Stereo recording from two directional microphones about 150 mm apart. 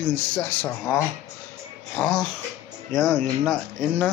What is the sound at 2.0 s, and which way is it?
Speech, 5° left (ahead or behind).